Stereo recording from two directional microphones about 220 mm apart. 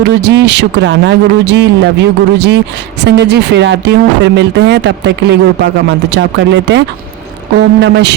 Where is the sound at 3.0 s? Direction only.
50° right (ahead or behind).